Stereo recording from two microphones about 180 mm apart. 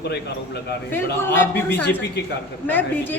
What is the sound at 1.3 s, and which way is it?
A woman's voice, 15° left (ahead or behind).